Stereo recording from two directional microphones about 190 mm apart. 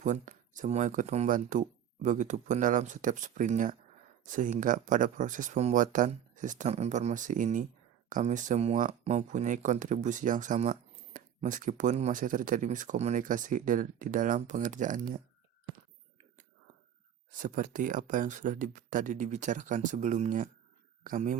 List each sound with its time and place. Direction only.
0.0 s speech: 40° right (ahead or behind)
17.3 s speech: 45° right (ahead or behind)